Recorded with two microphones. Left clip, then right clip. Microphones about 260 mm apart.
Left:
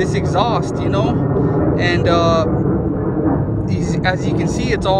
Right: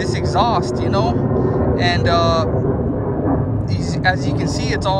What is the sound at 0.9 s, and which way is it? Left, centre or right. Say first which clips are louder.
Speech: left 1 dB; right.